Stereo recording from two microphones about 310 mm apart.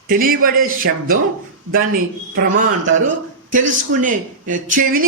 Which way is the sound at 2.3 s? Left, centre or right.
Right.